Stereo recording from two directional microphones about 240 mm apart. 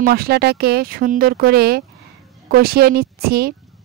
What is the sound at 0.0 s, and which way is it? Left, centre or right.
Speech, right.